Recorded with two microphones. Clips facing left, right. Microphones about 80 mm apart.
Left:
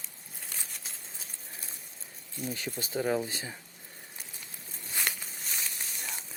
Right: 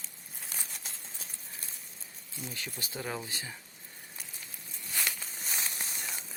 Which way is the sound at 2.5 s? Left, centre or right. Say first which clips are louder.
Left 7 dB; left.